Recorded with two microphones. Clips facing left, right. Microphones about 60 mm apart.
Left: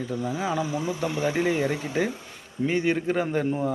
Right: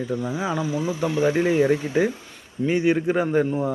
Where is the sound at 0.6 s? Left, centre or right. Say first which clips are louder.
Right 3 dB; centre.